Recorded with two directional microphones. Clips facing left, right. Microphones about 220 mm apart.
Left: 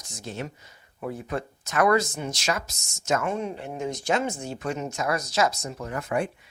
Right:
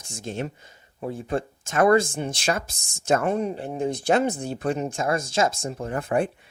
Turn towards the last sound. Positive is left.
turn(degrees=-30)  # may be behind; listen again after turning